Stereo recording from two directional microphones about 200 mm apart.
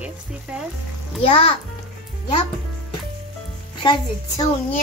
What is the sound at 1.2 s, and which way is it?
Speech, 30° left (ahead or behind).